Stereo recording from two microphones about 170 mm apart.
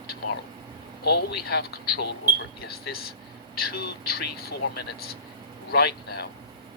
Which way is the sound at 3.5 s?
75° left (ahead or behind).